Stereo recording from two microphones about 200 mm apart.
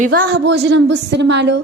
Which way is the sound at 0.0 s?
50° right (ahead or behind).